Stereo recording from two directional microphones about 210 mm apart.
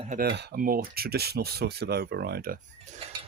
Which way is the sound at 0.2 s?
50° right (ahead or behind).